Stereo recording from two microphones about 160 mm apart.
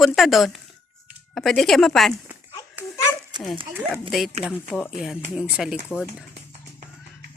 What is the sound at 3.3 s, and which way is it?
Dog, 30° right (ahead or behind).